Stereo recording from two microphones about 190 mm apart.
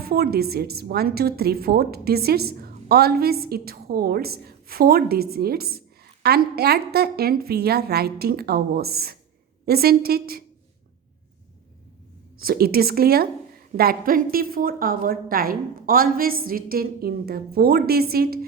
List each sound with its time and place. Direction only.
0.0 s a woman's voice: 55° right (ahead or behind)
12.4 s a woman's voice: 50° right (ahead or behind)